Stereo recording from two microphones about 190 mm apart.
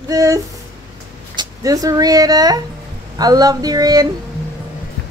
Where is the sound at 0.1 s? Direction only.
15° right (ahead or behind).